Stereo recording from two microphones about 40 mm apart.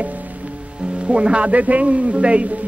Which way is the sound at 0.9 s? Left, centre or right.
Right.